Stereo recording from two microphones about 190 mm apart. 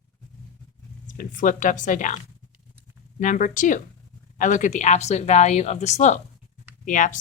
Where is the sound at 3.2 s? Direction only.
45° left (ahead or behind).